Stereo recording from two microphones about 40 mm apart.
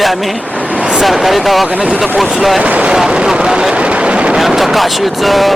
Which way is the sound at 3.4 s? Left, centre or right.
Right.